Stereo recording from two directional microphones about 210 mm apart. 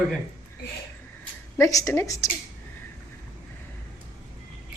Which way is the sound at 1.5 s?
15° left (ahead or behind).